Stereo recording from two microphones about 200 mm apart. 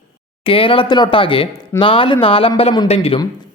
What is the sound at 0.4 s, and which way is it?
Speech, 25° left (ahead or behind).